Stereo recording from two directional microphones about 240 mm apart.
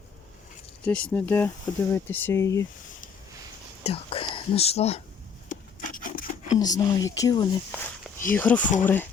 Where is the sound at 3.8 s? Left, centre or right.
Left.